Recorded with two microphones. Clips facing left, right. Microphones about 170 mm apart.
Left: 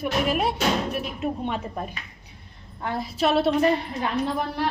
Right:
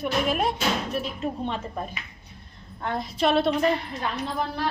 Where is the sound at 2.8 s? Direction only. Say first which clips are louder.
Even; 5° left (ahead or behind).